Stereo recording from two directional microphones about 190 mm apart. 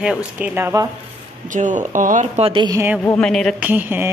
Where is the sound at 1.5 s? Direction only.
40° right (ahead or behind); by 2.8 s 25° right (ahead or behind).